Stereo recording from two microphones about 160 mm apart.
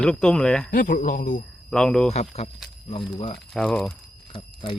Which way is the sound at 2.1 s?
40° left (ahead or behind).